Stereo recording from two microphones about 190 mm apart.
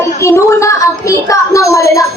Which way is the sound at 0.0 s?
15° left (ahead or behind).